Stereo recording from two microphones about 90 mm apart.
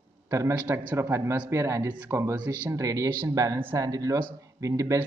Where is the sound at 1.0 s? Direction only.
30° right (ahead or behind).